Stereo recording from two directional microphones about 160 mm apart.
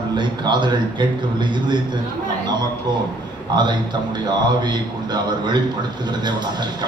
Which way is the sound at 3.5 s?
30° right (ahead or behind).